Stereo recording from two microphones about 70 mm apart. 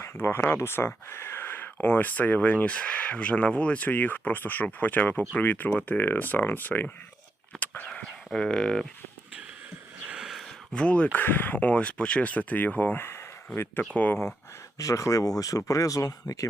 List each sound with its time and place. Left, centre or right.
0.0 s speech: left
7.6 s a sound: left
8.3 s speech: centre
10.1 s a sound: centre
10.8 s speech: centre
13.9 s speech: left
14.8 s speech: left